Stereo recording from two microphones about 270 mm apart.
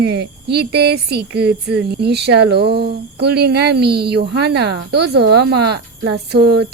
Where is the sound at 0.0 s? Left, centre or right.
Right.